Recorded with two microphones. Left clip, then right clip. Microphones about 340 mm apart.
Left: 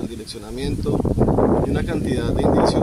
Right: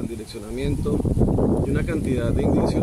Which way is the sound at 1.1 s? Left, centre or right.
Left.